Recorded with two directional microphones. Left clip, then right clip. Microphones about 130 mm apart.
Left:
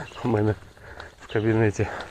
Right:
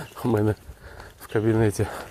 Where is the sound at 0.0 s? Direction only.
20° right (ahead or behind).